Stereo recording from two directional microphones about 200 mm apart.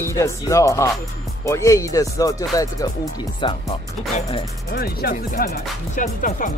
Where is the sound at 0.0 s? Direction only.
15° left (ahead or behind).